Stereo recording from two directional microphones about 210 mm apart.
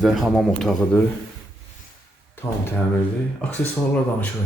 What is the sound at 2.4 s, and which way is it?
Speech, 10° left (ahead or behind).